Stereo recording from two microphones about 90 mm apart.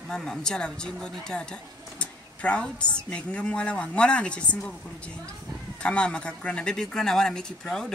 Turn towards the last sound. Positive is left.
turn(degrees=5)  # may be behind; listen again after turning